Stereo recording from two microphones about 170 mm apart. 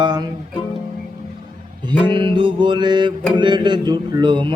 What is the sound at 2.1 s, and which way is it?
Music, 30° right (ahead or behind).